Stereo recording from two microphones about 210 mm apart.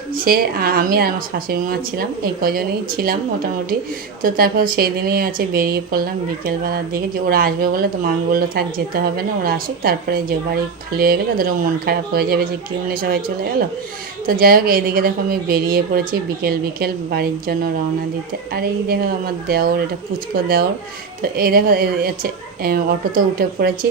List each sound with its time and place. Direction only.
0.1 s speech: 45° right (ahead or behind)
21.2 s speech: 45° right (ahead or behind)